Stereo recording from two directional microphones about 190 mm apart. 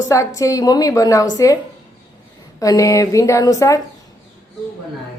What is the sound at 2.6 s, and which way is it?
Speech, 15° left (ahead or behind).